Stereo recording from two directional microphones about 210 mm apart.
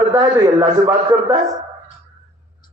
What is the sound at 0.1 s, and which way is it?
A man's voice, 20° right (ahead or behind).